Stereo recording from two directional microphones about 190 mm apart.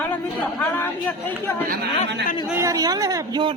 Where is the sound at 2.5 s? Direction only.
20° right (ahead or behind).